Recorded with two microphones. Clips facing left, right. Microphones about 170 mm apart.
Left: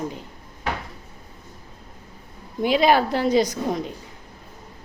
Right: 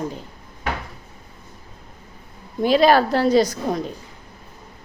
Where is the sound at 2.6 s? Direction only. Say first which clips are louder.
Right 3 dB; 15° left (ahead or behind).